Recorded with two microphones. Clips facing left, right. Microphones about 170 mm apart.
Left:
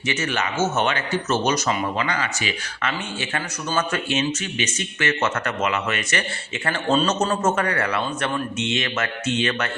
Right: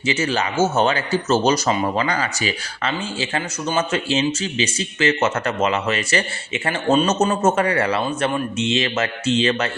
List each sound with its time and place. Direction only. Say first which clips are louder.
0.0 s a man's voice: right 4 dB; 30° right (ahead or behind)
6.7 s a man's voice: right 3 dB; 15° right (ahead or behind)